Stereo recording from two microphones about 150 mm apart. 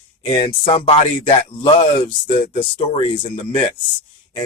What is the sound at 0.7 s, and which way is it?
Speech, 40° left (ahead or behind).